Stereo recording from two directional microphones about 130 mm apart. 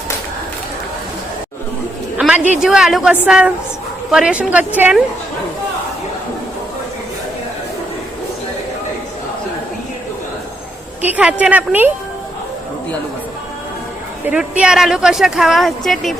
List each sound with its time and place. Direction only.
2.1 s a sound: 10° right (ahead or behind)
2.6 s a woman's voice: 5° right (ahead or behind)
11.0 s a woman's voice: 10° right (ahead or behind)
14.3 s speech: 10° right (ahead or behind)